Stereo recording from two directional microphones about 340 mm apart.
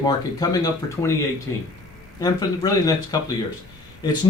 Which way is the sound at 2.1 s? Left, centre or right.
Centre.